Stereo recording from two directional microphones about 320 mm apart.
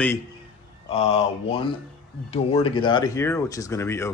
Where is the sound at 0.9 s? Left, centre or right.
Centre.